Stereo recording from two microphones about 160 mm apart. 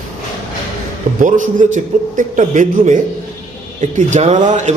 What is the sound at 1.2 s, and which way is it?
A man's voice, 55° right (ahead or behind).